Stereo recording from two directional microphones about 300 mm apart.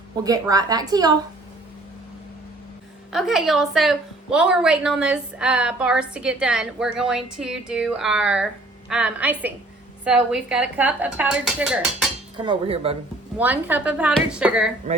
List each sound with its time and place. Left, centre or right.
0.2 s a woman's voice: centre
3.1 s a woman's voice: centre
12.5 s speech: centre
13.4 s a woman's voice: centre